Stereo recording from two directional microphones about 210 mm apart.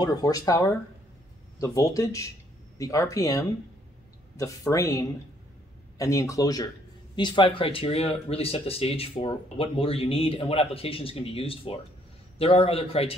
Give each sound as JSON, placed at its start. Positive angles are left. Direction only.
{"t": 0.0, "sound": "speech", "side_deg": 20}